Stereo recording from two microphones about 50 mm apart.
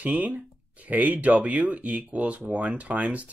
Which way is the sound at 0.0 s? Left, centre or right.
Right.